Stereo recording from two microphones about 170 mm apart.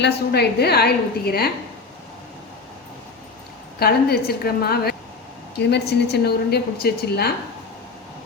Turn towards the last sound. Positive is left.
turn(degrees=70)  # may be behind; listen again after turning